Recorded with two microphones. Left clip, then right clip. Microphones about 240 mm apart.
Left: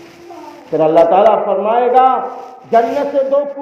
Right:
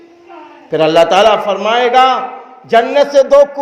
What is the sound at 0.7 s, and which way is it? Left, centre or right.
A man's voice, right.